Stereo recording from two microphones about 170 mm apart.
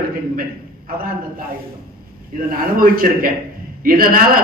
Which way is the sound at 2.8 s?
60° right (ahead or behind).